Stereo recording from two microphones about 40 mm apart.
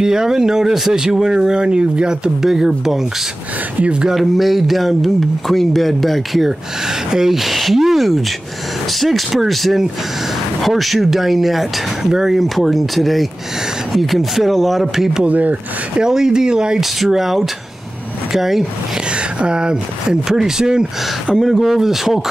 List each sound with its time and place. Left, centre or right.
0.0 s speech: centre
2.4 s speech: centre
3.8 s speech: right
4.1 s speech: centre
7.1 s speech: centre
12.4 s speech: centre
15.2 s speech: right
16.0 s speech: centre
17.0 s speech: centre
19.4 s speech: right